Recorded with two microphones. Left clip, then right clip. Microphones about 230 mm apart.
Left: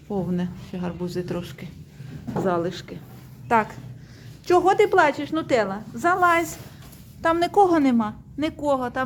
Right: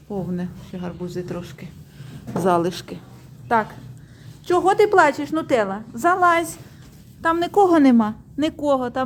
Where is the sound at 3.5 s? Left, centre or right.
Centre.